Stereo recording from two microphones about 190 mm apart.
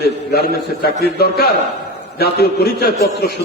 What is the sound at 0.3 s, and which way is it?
A man's voice, 55° left (ahead or behind).